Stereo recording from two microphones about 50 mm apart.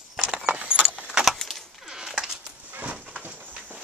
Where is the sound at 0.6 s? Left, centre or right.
Centre.